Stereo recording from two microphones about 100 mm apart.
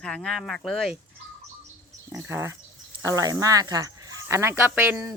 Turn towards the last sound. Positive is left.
turn(degrees=-20)  # may be behind; listen again after turning